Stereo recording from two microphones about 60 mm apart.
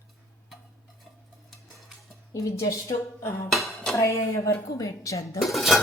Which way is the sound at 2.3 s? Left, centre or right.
Left.